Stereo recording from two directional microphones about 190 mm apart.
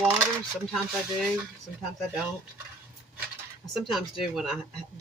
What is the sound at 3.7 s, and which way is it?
Speech, centre (ahead or behind).